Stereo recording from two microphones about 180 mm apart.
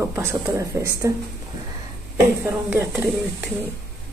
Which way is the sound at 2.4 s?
10° right (ahead or behind).